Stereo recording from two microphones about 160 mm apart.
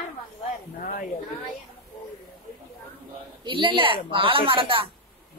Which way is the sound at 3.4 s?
30° right (ahead or behind).